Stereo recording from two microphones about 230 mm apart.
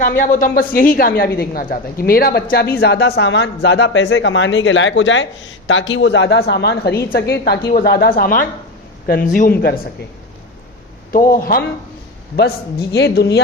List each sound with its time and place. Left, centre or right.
0.2 s a woman's voice: left
11.1 s a woman's voice: left